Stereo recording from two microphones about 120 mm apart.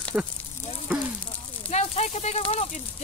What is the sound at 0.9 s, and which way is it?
Fire, 10° right (ahead or behind).